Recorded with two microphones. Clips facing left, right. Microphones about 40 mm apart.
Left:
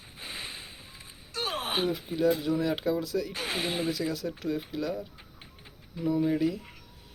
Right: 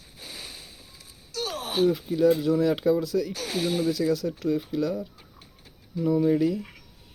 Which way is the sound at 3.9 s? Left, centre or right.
Centre.